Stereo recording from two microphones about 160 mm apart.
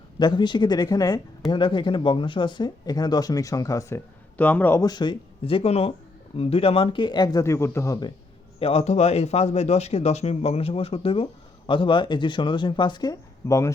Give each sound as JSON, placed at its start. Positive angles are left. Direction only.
{"t": 0.2, "sound": "speech", "side_deg": 30}
{"t": 4.8, "sound": "a man's voice", "side_deg": 25}
{"t": 8.5, "sound": "a man's voice", "side_deg": 40}